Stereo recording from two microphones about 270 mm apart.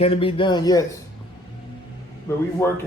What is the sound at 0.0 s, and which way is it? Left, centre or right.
Speech, left.